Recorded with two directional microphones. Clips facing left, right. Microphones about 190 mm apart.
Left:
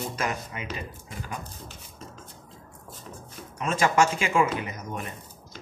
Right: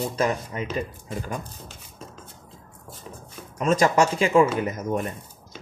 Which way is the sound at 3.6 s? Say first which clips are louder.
Right 3 dB; 40° right (ahead or behind).